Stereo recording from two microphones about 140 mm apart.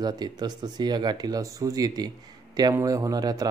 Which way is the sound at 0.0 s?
30° right (ahead or behind).